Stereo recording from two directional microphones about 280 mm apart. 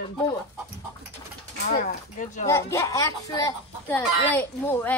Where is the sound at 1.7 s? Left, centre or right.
Left.